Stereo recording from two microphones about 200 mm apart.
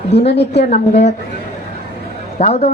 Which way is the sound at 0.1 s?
55° left (ahead or behind).